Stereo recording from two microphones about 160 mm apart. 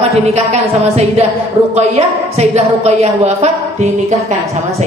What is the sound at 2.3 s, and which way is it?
A woman's voice, 40° right (ahead or behind).